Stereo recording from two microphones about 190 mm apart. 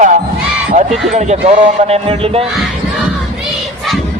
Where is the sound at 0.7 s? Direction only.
35° right (ahead or behind).